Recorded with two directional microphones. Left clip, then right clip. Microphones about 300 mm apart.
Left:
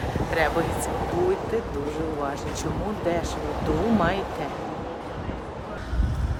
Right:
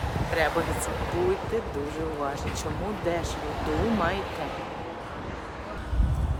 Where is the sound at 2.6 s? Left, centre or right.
Centre.